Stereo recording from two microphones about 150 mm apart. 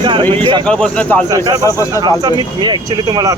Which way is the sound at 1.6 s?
20° left (ahead or behind).